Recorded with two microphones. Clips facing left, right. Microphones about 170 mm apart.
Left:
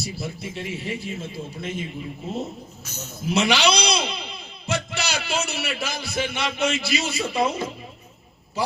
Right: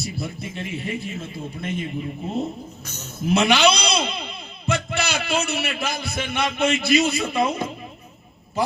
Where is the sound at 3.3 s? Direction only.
55° right (ahead or behind).